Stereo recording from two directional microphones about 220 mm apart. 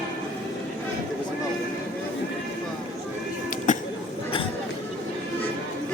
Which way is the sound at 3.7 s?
35° left (ahead or behind).